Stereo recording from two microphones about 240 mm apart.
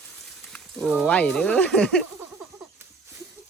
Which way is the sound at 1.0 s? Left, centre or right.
Centre.